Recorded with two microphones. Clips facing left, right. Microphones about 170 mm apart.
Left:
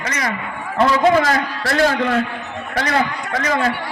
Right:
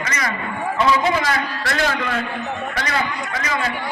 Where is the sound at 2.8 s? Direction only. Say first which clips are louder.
Left 7 dB; 50° left (ahead or behind).